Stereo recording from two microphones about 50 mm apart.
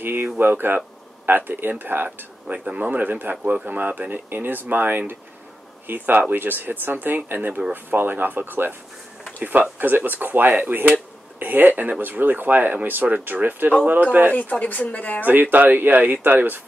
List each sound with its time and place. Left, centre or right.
0.0 s speech: right
2.0 s speech: right
2.8 s speech: right
14.3 s speech: left
15.2 s speech: right